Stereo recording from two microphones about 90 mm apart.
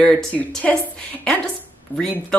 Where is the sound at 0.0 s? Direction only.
10° left (ahead or behind).